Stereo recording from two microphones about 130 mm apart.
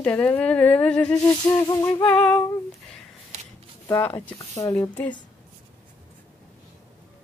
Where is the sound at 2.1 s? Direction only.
10° left (ahead or behind).